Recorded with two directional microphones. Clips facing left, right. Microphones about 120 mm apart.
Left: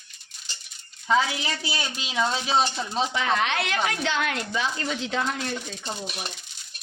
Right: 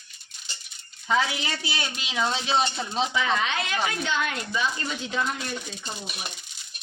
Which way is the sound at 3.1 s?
60° left (ahead or behind).